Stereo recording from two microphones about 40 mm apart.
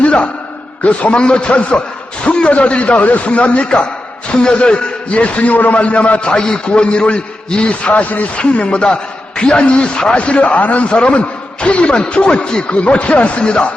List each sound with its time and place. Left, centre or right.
0.0 s a sound: left
0.9 s a man's voice: left
8.4 s a man's voice: left